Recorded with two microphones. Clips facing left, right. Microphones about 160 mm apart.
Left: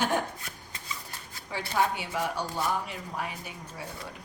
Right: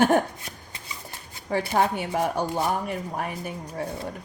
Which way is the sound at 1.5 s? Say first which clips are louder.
Right 5 dB; 50° right (ahead or behind).